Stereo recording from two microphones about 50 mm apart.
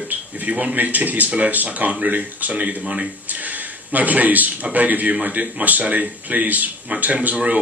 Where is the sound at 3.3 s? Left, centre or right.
Right.